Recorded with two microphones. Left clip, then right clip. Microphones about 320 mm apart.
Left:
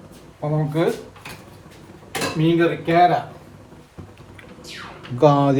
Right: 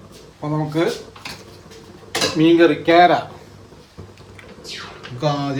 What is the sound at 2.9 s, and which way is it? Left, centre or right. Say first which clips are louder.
Speech: right 3 dB; right.